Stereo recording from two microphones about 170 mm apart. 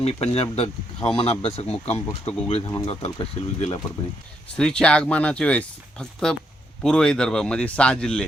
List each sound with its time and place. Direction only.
0.0 s speech: 35° left (ahead or behind)
4.5 s speech: 5° left (ahead or behind)